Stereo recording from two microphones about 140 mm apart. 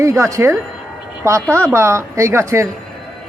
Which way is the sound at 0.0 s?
20° right (ahead or behind).